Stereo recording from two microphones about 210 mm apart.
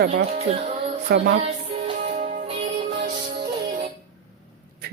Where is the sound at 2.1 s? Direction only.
40° right (ahead or behind).